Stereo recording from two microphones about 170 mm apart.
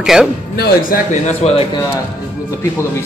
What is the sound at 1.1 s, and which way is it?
Speech, 40° left (ahead or behind).